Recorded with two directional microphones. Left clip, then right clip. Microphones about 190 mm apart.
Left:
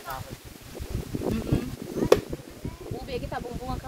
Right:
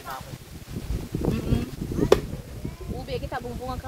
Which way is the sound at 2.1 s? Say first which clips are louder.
Even; 40° left (ahead or behind).